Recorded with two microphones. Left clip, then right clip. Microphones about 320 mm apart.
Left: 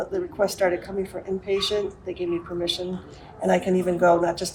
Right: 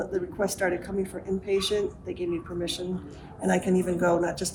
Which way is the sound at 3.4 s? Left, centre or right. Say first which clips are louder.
Left 4 dB; centre.